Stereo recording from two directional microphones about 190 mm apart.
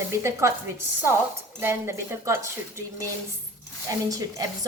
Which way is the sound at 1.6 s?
15° right (ahead or behind).